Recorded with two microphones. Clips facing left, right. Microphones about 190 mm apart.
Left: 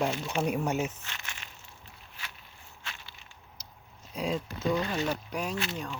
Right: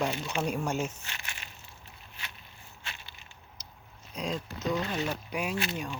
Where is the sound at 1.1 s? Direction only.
10° right (ahead or behind).